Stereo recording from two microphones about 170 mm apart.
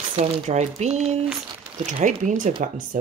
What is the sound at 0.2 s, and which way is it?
Speech, 40° right (ahead or behind).